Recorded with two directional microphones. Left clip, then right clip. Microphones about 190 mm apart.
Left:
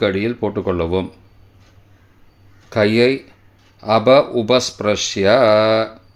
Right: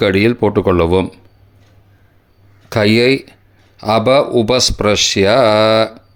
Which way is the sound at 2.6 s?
35° right (ahead or behind).